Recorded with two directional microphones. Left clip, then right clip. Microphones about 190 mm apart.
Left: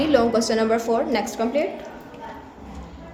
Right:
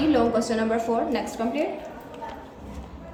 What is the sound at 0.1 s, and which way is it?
A woman's voice, 40° left (ahead or behind).